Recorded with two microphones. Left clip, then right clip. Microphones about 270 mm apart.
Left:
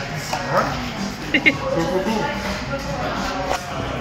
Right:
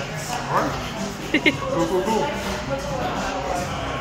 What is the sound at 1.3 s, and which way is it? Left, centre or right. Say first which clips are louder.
Speech: left 3 dB; centre.